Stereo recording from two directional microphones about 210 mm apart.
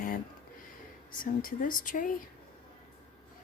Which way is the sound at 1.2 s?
40° left (ahead or behind).